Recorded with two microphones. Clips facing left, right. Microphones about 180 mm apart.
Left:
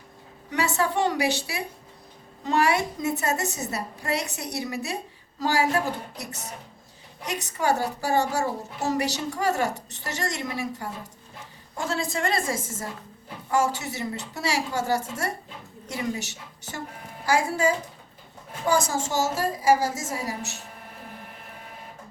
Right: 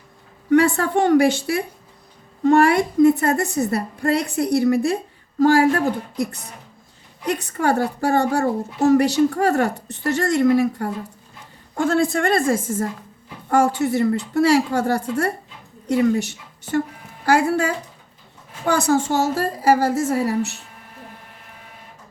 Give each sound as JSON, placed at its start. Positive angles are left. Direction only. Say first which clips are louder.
{"t": 0.5, "sound": "a woman's voice", "louder": "right 9 dB", "side_deg": -55}
{"t": 7.3, "sound": "a woman's voice", "louder": "right 5 dB", "side_deg": -55}